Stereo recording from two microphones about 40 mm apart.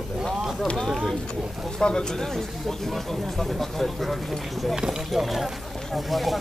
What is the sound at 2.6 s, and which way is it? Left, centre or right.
Speech, centre.